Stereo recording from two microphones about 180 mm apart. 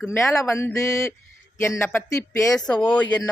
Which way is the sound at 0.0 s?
15° left (ahead or behind).